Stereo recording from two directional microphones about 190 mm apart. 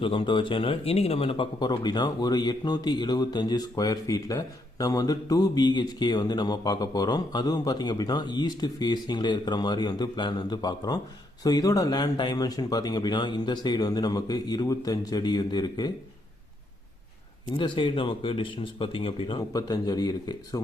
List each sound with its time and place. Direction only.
0.0 s speech: 25° left (ahead or behind)
17.5 s speech: 25° left (ahead or behind)